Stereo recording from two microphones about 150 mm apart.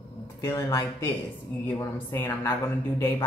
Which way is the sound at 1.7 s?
15° left (ahead or behind).